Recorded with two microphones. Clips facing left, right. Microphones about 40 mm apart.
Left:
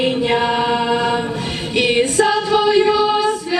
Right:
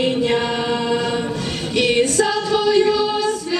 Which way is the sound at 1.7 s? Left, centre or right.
Centre.